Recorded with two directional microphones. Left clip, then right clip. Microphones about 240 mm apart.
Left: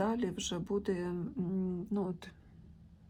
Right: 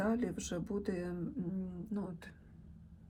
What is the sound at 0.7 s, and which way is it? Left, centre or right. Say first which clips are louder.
Speech: left 6 dB; left.